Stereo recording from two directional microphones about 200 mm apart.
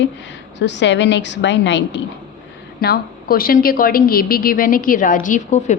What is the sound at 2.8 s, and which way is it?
A woman's voice, 50° left (ahead or behind).